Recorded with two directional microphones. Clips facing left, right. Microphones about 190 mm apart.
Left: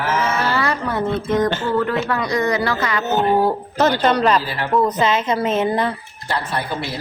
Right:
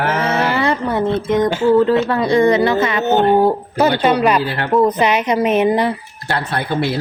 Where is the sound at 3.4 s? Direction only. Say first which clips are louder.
Right 3 dB; 15° right (ahead or behind).